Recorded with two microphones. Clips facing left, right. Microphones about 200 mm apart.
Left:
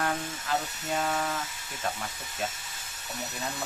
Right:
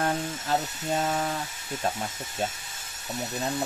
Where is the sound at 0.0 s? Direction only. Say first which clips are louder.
Right 3 dB; 30° right (ahead or behind).